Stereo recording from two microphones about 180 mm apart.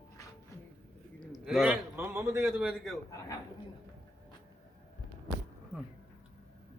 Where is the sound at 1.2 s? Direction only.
Centre (ahead or behind).